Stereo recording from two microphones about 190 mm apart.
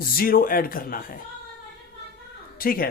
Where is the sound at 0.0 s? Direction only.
50° left (ahead or behind).